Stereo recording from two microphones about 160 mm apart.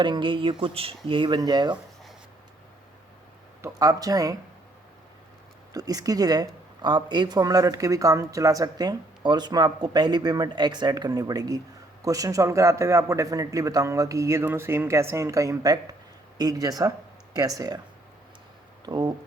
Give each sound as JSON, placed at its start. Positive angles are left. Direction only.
{"t": 0.0, "sound": "speech", "side_deg": -30}
{"t": 3.6, "sound": "speech", "side_deg": -20}
{"t": 5.7, "sound": "speech", "side_deg": -25}
{"t": 18.9, "sound": "speech", "side_deg": -25}